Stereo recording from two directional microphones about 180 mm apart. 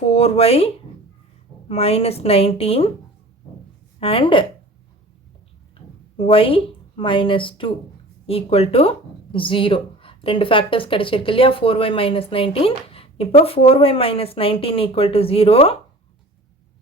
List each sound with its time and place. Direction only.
0.1 s speech: 35° left (ahead or behind)
4.0 s a woman's voice: 30° left (ahead or behind)
6.1 s a woman's voice: 30° left (ahead or behind)